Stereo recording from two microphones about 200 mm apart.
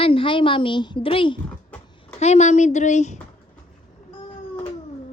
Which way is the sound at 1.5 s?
5° left (ahead or behind).